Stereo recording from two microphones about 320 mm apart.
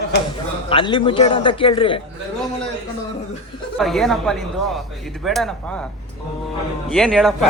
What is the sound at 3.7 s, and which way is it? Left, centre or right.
Speech, centre.